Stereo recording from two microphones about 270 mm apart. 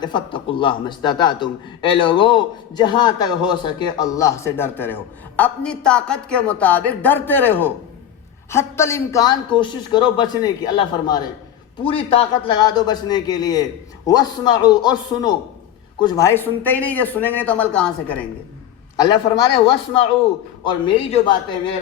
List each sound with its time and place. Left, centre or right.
0.0 s a man's voice: centre
18.9 s a man's voice: centre